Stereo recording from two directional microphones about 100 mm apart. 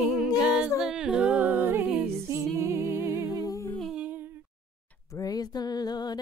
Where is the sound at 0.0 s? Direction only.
5° right (ahead or behind).